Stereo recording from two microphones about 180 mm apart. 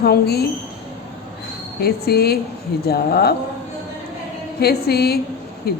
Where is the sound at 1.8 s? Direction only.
60° left (ahead or behind).